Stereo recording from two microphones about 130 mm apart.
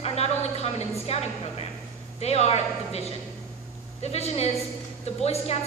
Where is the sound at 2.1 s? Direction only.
55° left (ahead or behind).